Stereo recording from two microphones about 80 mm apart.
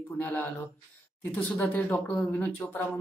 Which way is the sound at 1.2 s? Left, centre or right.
Left.